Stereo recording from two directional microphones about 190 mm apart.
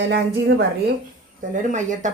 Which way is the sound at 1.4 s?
40° right (ahead or behind).